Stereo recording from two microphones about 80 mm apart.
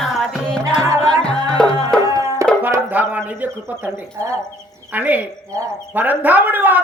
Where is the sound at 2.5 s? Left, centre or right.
Centre.